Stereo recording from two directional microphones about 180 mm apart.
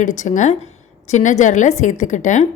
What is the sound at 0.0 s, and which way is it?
A woman's voice, 45° left (ahead or behind).